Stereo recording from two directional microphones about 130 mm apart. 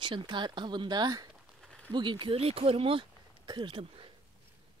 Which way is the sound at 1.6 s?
5° left (ahead or behind).